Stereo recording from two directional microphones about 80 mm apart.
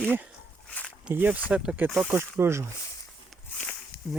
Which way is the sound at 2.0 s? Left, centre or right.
Right.